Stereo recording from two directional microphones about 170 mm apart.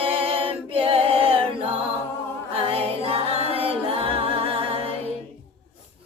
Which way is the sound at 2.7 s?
35° right (ahead or behind).